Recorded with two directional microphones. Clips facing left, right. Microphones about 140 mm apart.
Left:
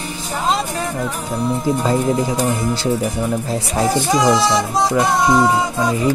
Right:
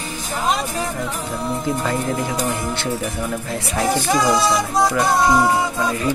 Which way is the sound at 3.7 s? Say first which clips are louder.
Left 2 dB; 20° left (ahead or behind).